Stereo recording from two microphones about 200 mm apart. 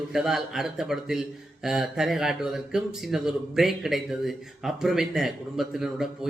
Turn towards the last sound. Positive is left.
turn(degrees=0)  # may be behind; listen again after turning